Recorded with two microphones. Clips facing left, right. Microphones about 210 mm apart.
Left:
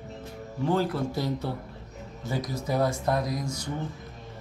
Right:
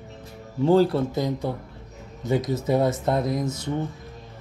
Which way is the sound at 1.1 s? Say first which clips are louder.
Right 4 dB; 15° right (ahead or behind).